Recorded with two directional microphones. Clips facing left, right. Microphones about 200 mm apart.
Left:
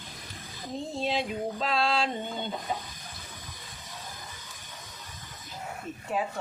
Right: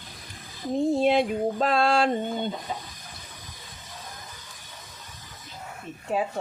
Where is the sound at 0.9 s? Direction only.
55° right (ahead or behind).